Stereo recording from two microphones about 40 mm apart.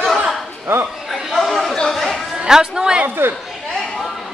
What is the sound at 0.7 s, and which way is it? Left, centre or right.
Speech, right.